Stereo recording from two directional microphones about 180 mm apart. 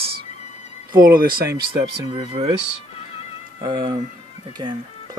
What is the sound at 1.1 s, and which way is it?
Speech, 55° right (ahead or behind).